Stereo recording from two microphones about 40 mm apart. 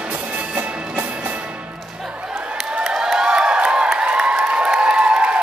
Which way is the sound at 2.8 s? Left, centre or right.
Centre.